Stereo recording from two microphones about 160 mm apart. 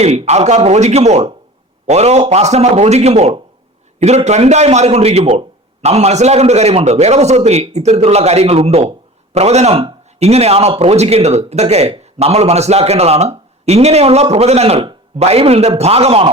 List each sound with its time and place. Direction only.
0.0 s a man's voice: 45° right (ahead or behind)